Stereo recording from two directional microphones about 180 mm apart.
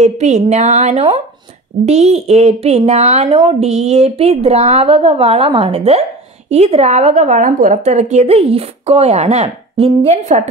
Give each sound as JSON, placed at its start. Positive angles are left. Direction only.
{"t": 0.0, "sound": "a woman's voice", "side_deg": -40}